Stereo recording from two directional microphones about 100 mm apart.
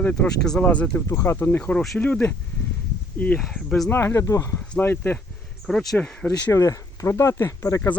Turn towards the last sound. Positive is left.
turn(degrees=25)  # may be behind; listen again after turning